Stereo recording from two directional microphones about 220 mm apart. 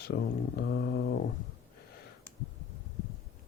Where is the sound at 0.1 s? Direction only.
45° left (ahead or behind).